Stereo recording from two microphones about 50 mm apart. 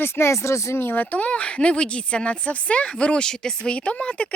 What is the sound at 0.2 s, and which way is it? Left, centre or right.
Speech, left.